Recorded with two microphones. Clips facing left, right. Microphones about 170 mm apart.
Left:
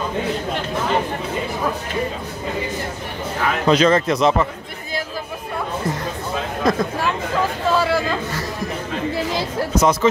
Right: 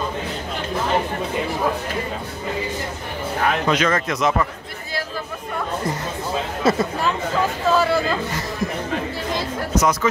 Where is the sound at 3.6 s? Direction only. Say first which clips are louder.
Left 5 dB; 30° left (ahead or behind).